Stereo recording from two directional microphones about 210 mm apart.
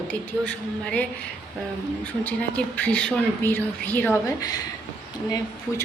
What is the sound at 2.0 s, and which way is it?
Speech, 5° left (ahead or behind).